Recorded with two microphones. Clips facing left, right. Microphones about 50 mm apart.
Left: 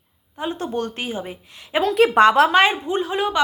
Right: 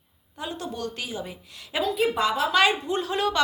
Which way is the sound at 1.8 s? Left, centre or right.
Left.